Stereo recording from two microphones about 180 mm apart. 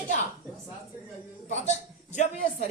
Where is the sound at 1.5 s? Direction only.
40° left (ahead or behind).